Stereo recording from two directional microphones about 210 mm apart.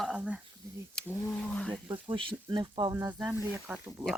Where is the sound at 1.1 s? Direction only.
5° left (ahead or behind).